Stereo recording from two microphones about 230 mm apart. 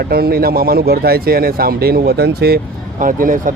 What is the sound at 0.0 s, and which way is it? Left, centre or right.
Speech, right.